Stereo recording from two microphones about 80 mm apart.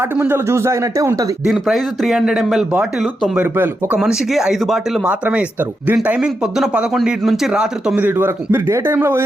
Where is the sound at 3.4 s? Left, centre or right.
Right.